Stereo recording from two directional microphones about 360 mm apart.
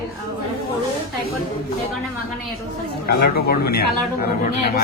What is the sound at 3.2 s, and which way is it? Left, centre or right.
Speech, left.